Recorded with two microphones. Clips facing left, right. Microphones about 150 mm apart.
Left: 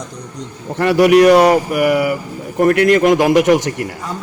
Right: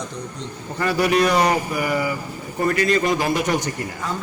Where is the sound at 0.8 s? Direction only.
80° left.